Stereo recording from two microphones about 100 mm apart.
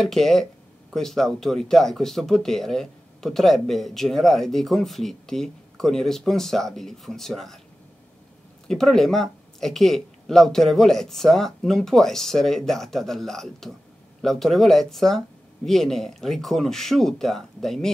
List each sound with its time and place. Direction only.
0.0 s speech: centre (ahead or behind)
8.6 s speech: 5° left (ahead or behind)